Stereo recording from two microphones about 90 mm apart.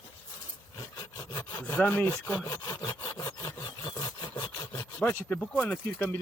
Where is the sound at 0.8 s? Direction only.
35° left (ahead or behind).